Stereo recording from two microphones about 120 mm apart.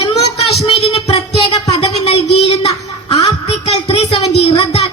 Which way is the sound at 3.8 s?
50° left (ahead or behind).